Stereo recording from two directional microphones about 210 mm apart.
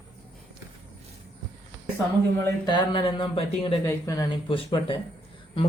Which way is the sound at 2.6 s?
20° left (ahead or behind).